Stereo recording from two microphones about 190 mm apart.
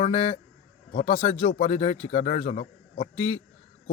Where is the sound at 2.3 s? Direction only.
45° left (ahead or behind).